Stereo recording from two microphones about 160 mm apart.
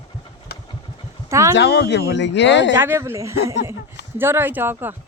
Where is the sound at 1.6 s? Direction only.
90° left.